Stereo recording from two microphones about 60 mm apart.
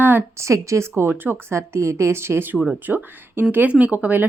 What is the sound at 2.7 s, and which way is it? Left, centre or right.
A woman's voice, right.